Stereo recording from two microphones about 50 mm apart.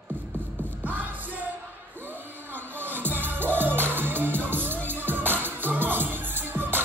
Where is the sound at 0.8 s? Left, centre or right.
Right.